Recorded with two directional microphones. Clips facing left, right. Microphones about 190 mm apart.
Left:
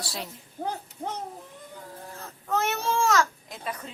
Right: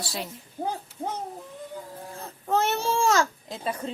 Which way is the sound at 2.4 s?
30° right (ahead or behind).